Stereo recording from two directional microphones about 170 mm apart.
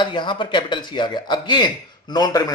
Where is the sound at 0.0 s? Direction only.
30° left (ahead or behind).